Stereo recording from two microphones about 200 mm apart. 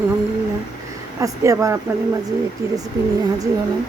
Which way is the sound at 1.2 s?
15° right (ahead or behind).